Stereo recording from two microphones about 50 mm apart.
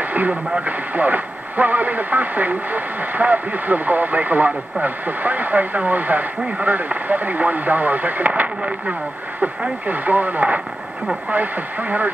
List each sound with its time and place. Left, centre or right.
0.0 s radio: right
0.7 s speech: right